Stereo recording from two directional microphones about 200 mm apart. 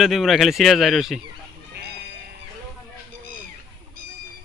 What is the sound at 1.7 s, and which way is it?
Music, 50° right (ahead or behind).